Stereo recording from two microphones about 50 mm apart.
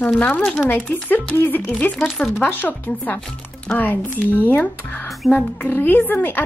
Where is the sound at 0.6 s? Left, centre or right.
Left.